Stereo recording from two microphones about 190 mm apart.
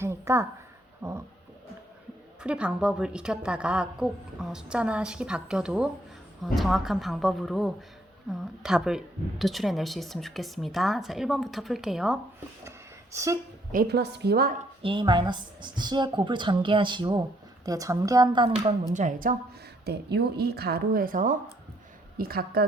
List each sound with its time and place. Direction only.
0.0 s a sound: 15° right (ahead or behind)
1.0 s a woman's voice: 15° right (ahead or behind)
2.4 s a woman's voice: 5° right (ahead or behind)
13.1 s a woman's voice: 15° right (ahead or behind)
13.7 s speech: 60° right (ahead or behind)
14.8 s speech: 25° right (ahead or behind)
18.9 s a woman's voice: 45° right (ahead or behind)
19.8 s speech: 60° right (ahead or behind)